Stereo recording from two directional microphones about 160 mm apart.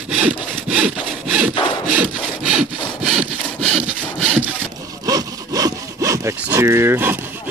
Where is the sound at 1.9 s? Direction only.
5° right (ahead or behind).